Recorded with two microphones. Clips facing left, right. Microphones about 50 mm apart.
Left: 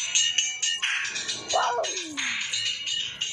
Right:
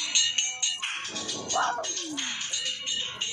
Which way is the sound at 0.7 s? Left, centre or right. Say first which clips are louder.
Left 6 dB; left.